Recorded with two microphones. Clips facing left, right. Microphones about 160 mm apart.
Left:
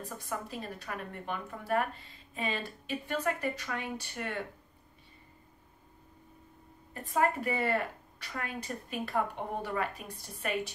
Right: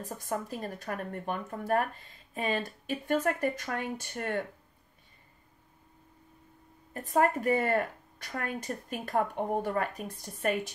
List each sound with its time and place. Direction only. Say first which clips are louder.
0.2 s speech: right 5 dB; 45° right (ahead or behind)
6.9 s speech: right 3 dB; 45° right (ahead or behind)